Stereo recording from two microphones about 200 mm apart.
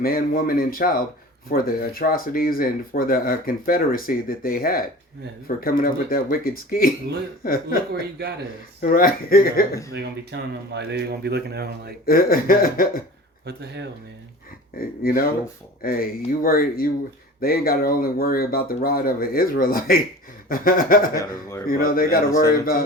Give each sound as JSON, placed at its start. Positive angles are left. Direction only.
{"t": 0.0, "sound": "speech", "side_deg": 45}
{"t": 8.8, "sound": "speech", "side_deg": 45}
{"t": 9.9, "sound": "speech", "side_deg": -55}
{"t": 12.0, "sound": "speech", "side_deg": 45}
{"t": 13.4, "sound": "speech", "side_deg": -55}
{"t": 14.8, "sound": "speech", "side_deg": 45}
{"t": 22.3, "sound": "speech", "side_deg": 15}